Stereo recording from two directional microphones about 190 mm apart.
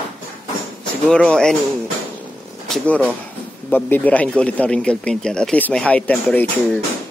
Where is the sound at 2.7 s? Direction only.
5° left (ahead or behind).